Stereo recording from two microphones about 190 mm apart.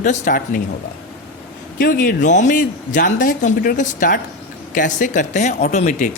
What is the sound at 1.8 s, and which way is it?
A man's voice, 45° left (ahead or behind).